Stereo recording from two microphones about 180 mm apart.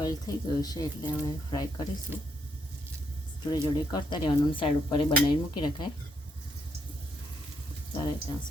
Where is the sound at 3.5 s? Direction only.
25° left (ahead or behind).